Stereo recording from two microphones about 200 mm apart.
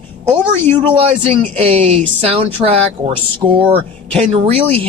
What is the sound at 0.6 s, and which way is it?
Speech, 30° right (ahead or behind).